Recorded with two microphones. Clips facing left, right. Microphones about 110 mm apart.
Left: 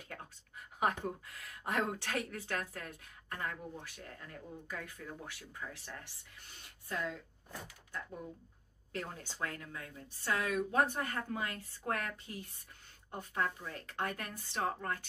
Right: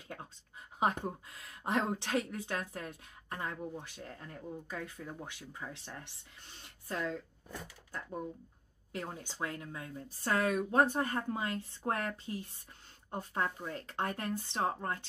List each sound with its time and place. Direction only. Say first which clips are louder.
0.1 s a woman's voice: right 4 dB; 25° right (ahead or behind)
8.9 s a woman's voice: right 1 dB; 20° right (ahead or behind)
10.2 s a woman's voice: right 3 dB; 40° right (ahead or behind)